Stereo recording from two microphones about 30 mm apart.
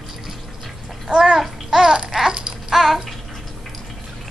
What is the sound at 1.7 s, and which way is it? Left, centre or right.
Babbling, centre.